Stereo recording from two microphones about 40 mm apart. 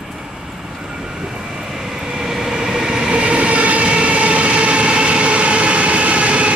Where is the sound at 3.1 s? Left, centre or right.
Right.